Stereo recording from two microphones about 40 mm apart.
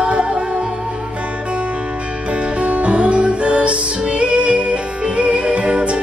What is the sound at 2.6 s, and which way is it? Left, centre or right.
Music, right.